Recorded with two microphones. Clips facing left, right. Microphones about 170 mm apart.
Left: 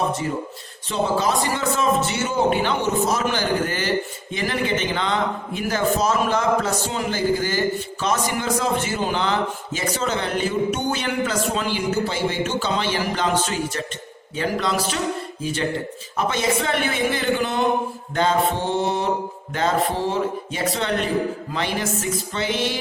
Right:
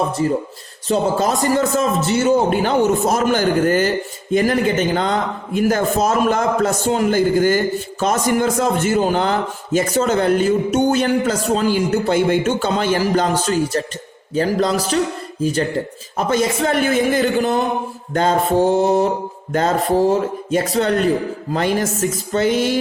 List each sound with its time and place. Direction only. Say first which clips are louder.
0.9 s a man's voice: right 4 dB; 45° right (ahead or behind)